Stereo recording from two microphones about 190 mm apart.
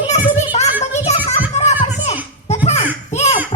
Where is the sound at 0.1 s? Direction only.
35° left (ahead or behind).